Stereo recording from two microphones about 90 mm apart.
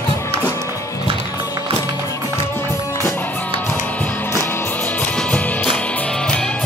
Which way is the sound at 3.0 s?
20° left (ahead or behind).